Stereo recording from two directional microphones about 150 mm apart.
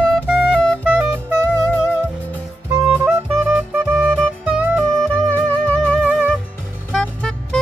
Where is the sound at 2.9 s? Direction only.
15° right (ahead or behind).